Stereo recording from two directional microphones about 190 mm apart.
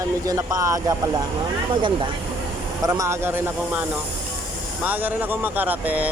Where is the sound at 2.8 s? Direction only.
15° right (ahead or behind).